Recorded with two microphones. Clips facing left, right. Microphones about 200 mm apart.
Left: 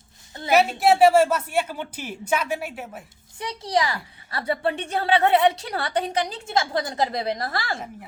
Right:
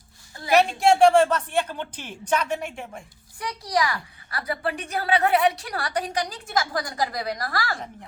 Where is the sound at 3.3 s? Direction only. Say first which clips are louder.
Left 2 dB; 25° left (ahead or behind).